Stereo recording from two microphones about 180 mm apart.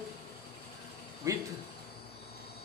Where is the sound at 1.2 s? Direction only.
15° right (ahead or behind).